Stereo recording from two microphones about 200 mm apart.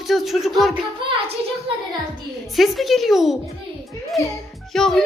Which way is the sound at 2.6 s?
Centre (ahead or behind).